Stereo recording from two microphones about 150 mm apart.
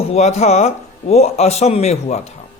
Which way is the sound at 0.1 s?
45° left (ahead or behind).